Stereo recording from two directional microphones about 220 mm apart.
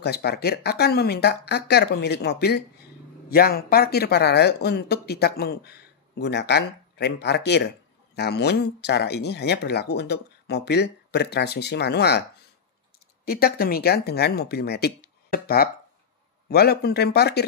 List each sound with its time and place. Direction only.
0.0 s speech: 50° left (ahead or behind)
13.2 s speech: 45° left (ahead or behind)